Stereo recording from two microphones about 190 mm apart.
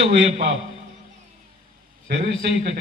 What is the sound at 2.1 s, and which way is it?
Speech, 60° right (ahead or behind).